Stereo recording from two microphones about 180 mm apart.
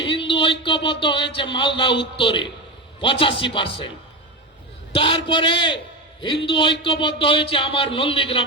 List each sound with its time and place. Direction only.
0.0 s speech: 30° left (ahead or behind)
4.9 s speech: 30° left (ahead or behind)